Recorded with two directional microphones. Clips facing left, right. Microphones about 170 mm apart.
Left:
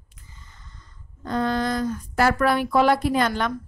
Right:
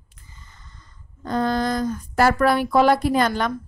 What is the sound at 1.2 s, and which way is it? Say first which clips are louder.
A woman's voice: right 2 dB; 40° right (ahead or behind).